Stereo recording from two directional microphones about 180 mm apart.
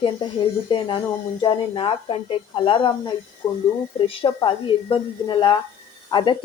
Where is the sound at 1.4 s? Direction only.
25° left (ahead or behind).